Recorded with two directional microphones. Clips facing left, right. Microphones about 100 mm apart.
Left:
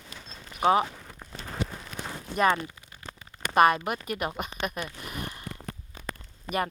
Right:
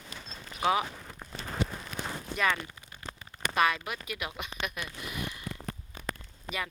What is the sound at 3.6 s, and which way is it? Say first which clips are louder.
Speech: left 7 dB; 50° left (ahead or behind).